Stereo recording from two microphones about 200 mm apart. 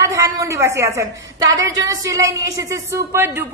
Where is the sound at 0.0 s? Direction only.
15° right (ahead or behind).